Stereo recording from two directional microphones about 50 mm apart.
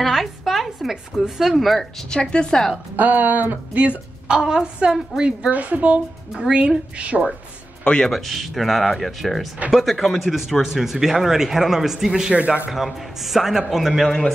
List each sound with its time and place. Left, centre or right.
0.0 s a sound: centre
1.4 s speech: centre
1.8 s a woman's voice: centre
3.0 s speech: right
4.3 s speech: centre
5.5 s a woman's voice: right
7.8 s speech: centre
8.1 s speech: centre
12.4 s a woman's voice: right
12.7 s speech: centre